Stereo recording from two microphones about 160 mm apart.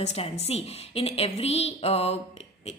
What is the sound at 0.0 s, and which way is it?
A woman's voice, 40° left (ahead or behind).